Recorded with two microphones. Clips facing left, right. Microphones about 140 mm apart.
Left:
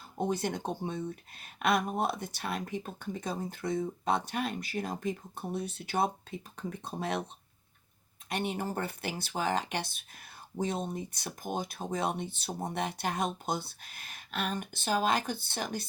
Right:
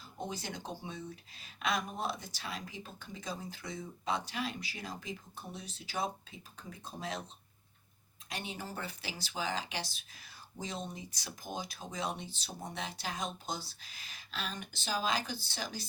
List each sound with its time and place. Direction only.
0.2 s speech: 55° left (ahead or behind)
8.3 s speech: 60° left (ahead or behind)